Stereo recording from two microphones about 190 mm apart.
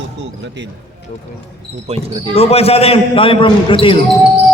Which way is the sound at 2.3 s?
30° left (ahead or behind).